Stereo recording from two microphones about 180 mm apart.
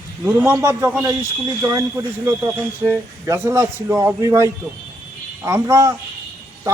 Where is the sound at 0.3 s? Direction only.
15° right (ahead or behind).